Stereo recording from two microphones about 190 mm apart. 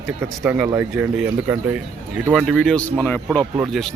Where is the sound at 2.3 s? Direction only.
Centre (ahead or behind).